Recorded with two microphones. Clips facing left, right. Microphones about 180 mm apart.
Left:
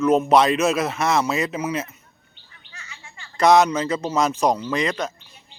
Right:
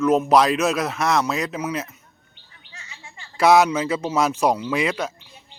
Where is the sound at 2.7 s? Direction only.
20° right (ahead or behind).